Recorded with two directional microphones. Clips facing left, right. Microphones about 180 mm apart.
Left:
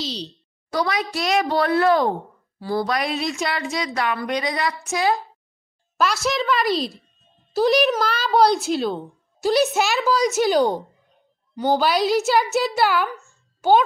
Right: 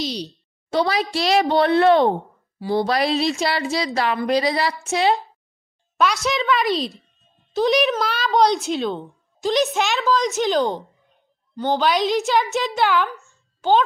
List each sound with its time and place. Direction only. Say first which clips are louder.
0.0 s a child's voice: right 3 dB; 15° right (ahead or behind)
0.7 s speech: right 3 dB; 30° right (ahead or behind)
2.9 s a woman's voice: right 4 dB; 30° right (ahead or behind)
5.9 s a woman's voice: right 1 dB; centre (ahead or behind)
13.6 s a child's voice: left 1 dB; 15° left (ahead or behind)